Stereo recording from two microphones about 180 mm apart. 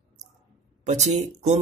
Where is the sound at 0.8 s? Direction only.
40° right (ahead or behind).